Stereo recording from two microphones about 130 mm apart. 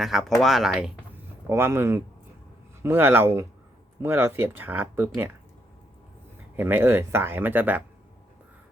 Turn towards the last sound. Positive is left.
turn(degrees=-15)  # may be behind; listen again after turning